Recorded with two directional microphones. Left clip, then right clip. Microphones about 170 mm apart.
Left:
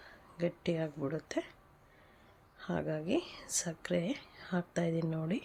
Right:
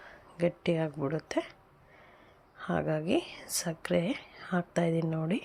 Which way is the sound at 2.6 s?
10° right (ahead or behind).